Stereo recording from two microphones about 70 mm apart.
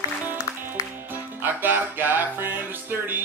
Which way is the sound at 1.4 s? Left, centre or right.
Right.